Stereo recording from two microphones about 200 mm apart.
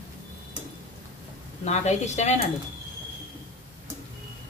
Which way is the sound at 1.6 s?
35° left (ahead or behind).